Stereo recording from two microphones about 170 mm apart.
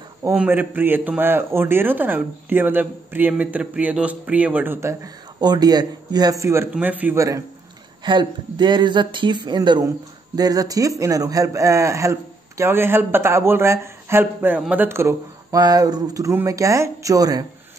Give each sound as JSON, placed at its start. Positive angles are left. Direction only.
{"t": 0.2, "sound": "a man's voice", "side_deg": -10}